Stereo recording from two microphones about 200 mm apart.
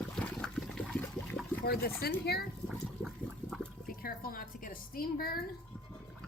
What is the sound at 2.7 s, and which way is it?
Water, centre (ahead or behind).